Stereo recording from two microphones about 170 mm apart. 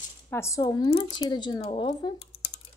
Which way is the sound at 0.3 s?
15° left (ahead or behind).